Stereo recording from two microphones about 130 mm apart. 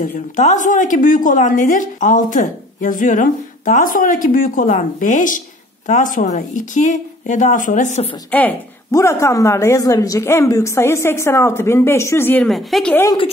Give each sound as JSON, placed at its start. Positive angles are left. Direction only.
{"t": 0.0, "sound": "a woman's voice", "side_deg": 70}
{"t": 8.3, "sound": "a woman's voice", "side_deg": 10}
{"t": 8.9, "sound": "a woman's voice", "side_deg": 20}
{"t": 12.4, "sound": "a woman's voice", "side_deg": 0}